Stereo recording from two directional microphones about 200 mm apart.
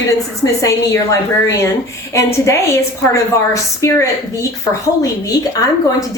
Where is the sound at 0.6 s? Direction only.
15° left (ahead or behind).